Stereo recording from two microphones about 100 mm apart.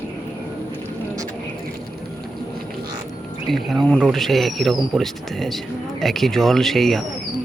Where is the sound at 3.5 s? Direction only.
Centre (ahead or behind).